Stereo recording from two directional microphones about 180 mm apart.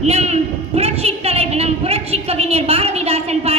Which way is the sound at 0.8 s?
35° right (ahead or behind).